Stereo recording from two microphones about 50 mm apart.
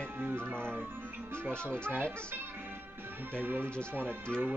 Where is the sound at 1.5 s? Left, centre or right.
Left.